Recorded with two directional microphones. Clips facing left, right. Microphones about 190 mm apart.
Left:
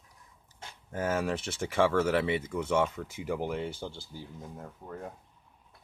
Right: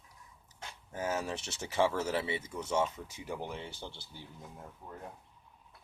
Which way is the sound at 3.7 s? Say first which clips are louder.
Left 6 dB; 45° left (ahead or behind).